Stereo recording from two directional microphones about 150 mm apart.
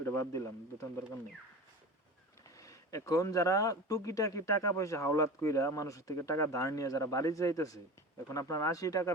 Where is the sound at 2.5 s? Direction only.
20° left (ahead or behind).